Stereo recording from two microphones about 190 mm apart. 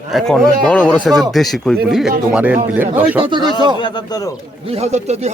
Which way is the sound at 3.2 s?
25° right (ahead or behind).